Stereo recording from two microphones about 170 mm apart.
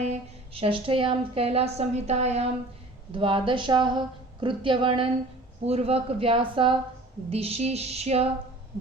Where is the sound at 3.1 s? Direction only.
30° right (ahead or behind).